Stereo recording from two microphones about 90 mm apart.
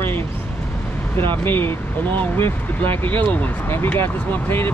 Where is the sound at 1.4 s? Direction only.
25° left (ahead or behind).